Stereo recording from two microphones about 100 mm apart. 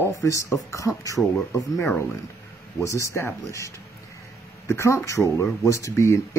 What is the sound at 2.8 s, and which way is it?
Speech, 30° left (ahead or behind).